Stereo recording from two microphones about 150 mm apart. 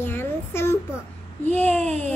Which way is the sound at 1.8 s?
50° right (ahead or behind).